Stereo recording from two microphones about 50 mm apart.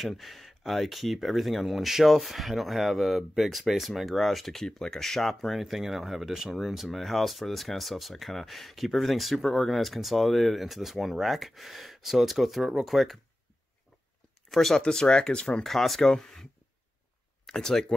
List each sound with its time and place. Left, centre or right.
0.0 s speech: centre
14.5 s speech: centre
15.6 s speech: centre
17.5 s speech: centre